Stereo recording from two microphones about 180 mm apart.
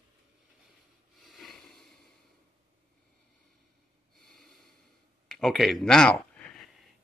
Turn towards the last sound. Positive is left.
turn(degrees=5)  # may be behind; listen again after turning